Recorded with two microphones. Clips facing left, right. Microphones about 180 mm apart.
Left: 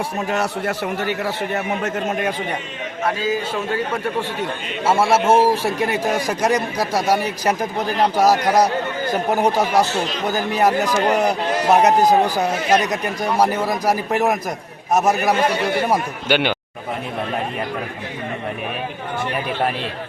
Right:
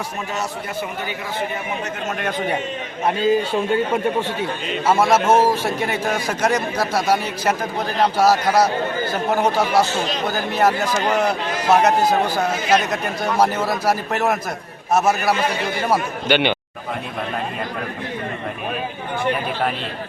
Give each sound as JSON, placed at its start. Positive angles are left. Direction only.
{"t": 0.3, "sound": "a man's voice", "side_deg": 65}
{"t": 3.1, "sound": "a man's voice", "side_deg": -25}
{"t": 4.9, "sound": "a man's voice", "side_deg": 5}
{"t": 13.2, "sound": "a man's voice", "side_deg": 10}